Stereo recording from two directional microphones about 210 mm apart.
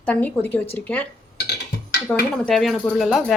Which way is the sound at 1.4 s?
50° left (ahead or behind).